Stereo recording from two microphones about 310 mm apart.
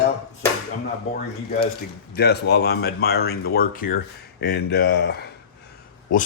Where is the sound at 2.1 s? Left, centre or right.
Left.